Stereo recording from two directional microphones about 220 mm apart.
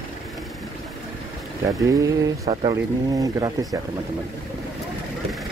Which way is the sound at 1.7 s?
15° right (ahead or behind).